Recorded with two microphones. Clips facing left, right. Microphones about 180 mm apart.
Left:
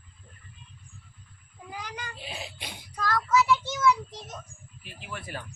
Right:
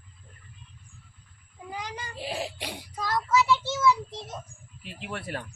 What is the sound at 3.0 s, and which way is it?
Child singing, 25° right (ahead or behind).